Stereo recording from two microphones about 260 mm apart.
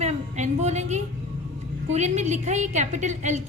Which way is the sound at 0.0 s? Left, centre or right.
Right.